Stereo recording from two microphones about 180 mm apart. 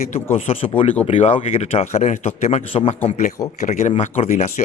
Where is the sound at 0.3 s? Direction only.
30° left (ahead or behind).